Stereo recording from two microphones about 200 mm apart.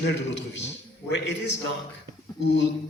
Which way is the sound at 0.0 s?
65° left (ahead or behind).